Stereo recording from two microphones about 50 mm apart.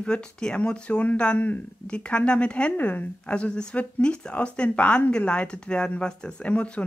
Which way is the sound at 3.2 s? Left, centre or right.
Left.